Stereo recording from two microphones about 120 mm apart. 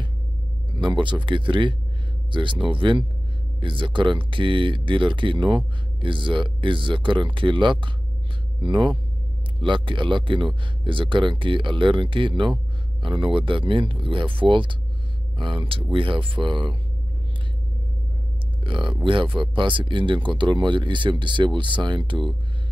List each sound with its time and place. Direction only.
0.7 s speech: 40° right (ahead or behind)
18.6 s speech: 45° right (ahead or behind)